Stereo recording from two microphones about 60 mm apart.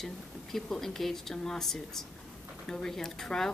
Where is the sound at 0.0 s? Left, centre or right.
Centre.